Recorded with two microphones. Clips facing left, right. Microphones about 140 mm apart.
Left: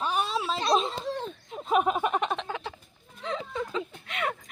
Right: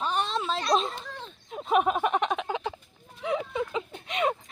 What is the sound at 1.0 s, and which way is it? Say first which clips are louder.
Speech: left 9 dB; 40° left (ahead or behind).